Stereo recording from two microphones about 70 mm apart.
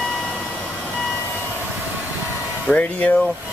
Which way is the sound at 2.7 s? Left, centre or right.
Left.